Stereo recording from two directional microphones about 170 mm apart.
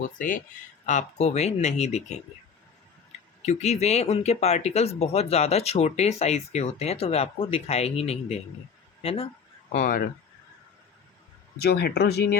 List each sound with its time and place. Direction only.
0.2 s speech: 50° left (ahead or behind); by 9.3 s 35° left (ahead or behind)
9.7 s speech: 55° left (ahead or behind)
11.6 s speech: 70° left (ahead or behind)